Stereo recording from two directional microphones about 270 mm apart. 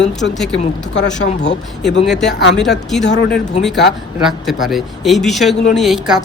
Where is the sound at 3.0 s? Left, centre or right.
Left.